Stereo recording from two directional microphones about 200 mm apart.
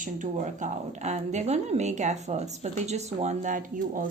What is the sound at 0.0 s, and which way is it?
Speech, 40° right (ahead or behind).